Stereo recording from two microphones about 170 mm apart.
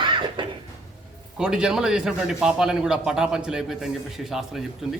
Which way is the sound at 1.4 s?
5° right (ahead or behind).